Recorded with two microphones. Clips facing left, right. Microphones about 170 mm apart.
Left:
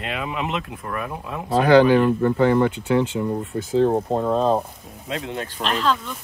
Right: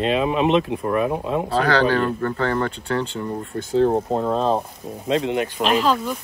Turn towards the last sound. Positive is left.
turn(degrees=-5)  # may be behind; listen again after turning